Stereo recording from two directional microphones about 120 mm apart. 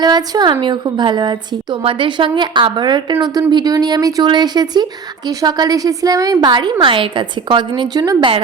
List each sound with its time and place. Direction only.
0.0 s a woman's voice: 35° right (ahead or behind)